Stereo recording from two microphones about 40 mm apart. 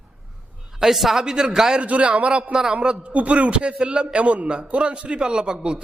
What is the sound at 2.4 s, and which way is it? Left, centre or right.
A man's voice, centre.